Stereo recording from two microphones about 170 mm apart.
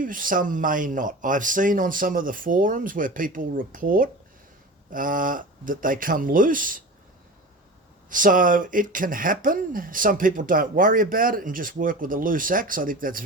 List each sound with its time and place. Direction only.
0.0 s speech: 55° right (ahead or behind)
8.1 s speech: 50° right (ahead or behind)